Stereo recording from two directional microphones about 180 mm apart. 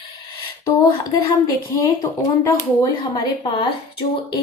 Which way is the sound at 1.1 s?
20° left (ahead or behind).